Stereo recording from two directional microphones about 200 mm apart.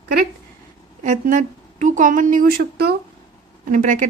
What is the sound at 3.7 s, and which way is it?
Speech, 40° right (ahead or behind).